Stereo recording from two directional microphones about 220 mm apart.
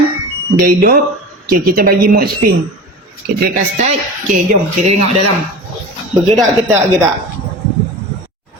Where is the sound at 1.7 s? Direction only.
40° right (ahead or behind).